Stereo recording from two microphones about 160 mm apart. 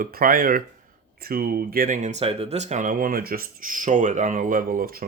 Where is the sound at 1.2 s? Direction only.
70° right (ahead or behind).